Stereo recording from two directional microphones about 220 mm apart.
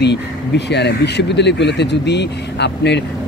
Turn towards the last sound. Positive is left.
turn(degrees=50)  # may be behind; listen again after turning